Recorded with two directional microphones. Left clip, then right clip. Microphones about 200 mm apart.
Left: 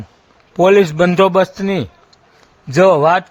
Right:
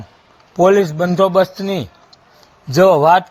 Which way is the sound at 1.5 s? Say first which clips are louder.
Left 2 dB; 15° left (ahead or behind).